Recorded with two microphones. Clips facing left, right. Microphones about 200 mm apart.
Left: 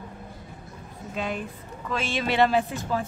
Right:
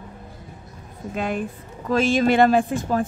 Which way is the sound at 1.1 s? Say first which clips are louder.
Right 5 dB; 50° right (ahead or behind).